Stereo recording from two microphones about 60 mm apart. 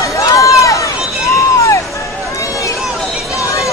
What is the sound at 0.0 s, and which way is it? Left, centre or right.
Run, left.